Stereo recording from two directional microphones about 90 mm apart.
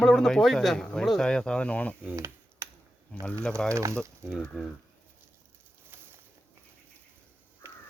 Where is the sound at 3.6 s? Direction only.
10° left (ahead or behind).